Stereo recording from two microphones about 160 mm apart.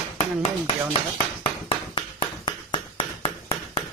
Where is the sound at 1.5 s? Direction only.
30° left (ahead or behind).